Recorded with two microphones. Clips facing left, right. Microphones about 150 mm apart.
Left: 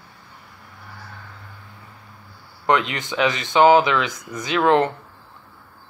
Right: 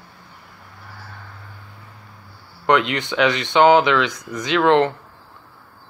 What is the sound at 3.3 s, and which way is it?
Speech, 5° left (ahead or behind).